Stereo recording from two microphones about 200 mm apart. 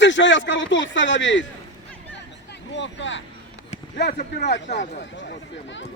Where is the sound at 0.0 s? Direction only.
65° left (ahead or behind).